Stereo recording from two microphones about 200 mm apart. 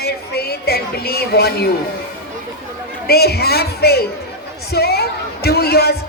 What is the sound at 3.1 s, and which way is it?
A man's voice, 50° left (ahead or behind).